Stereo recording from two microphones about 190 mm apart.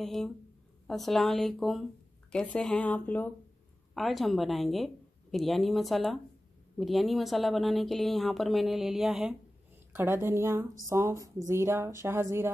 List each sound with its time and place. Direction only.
0.0 s a woman's voice: centre (ahead or behind); by 12.4 s 15° right (ahead or behind)